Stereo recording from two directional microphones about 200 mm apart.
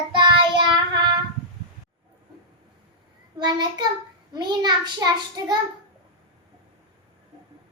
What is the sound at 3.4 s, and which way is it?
A child's voice, 20° right (ahead or behind).